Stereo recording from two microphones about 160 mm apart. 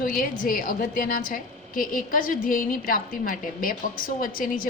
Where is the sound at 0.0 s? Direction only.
60° left (ahead or behind).